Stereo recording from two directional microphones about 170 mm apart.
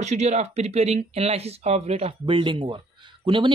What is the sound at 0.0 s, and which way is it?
Speech, 40° right (ahead or behind).